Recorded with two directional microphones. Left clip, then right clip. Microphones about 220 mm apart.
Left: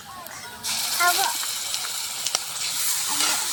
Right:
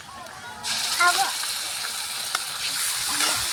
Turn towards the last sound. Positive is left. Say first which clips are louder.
# even
turn(degrees=-5)  # may be behind; listen again after turning